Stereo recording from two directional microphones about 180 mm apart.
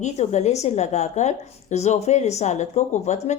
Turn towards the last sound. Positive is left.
turn(degrees=40)  # may be behind; listen again after turning